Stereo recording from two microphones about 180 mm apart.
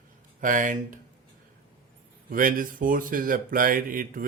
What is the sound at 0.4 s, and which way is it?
Speech, 45° right (ahead or behind).